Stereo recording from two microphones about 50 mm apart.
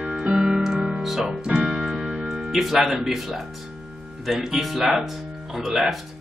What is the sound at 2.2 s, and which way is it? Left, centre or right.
Speech, centre.